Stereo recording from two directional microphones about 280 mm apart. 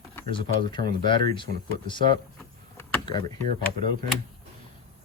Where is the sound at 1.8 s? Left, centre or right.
Centre.